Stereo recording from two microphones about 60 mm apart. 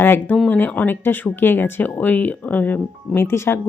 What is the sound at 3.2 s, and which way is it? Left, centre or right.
Speech, left.